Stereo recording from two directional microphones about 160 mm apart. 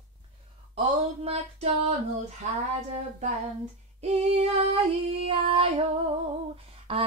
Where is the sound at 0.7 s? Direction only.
40° right (ahead or behind).